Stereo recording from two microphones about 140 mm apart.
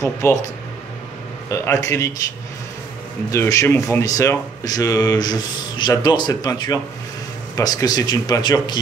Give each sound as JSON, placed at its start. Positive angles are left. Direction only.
{"t": 0.0, "sound": "speech", "side_deg": 20}
{"t": 1.5, "sound": "speech", "side_deg": 20}
{"t": 3.3, "sound": "speech", "side_deg": 20}